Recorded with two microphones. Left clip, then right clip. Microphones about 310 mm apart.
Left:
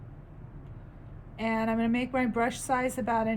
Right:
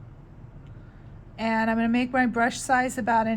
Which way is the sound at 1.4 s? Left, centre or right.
Right.